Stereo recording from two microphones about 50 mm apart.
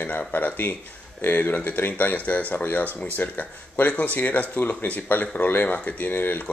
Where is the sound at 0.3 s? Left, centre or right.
Left.